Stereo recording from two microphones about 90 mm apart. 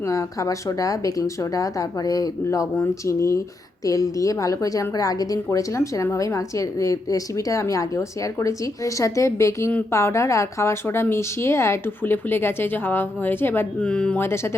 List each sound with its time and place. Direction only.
0.0 s a woman's voice: 35° left (ahead or behind)
13.7 s speech: 10° left (ahead or behind)
14.2 s a woman's voice: 30° left (ahead or behind)